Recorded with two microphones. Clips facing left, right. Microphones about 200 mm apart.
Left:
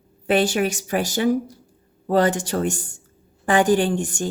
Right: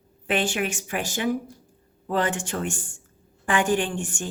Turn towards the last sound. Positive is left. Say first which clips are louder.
# left 6 dB
turn(degrees=35)  # may be behind; listen again after turning